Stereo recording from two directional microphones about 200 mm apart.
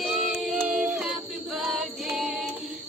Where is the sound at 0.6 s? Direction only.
5° right (ahead or behind).